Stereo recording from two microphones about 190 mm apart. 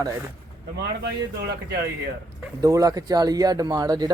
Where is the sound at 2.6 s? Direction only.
20° right (ahead or behind).